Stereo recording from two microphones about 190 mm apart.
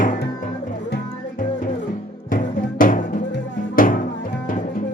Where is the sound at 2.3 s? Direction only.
45° left (ahead or behind).